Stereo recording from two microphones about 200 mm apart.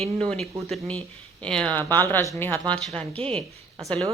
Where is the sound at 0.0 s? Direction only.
5° left (ahead or behind).